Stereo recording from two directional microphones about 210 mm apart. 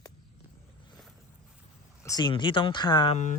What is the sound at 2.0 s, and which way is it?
Speech, 20° left (ahead or behind).